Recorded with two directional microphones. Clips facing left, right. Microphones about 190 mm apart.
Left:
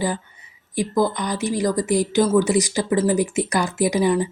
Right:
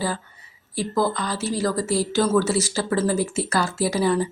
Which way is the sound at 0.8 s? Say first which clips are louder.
Left 2 dB; 15° left (ahead or behind).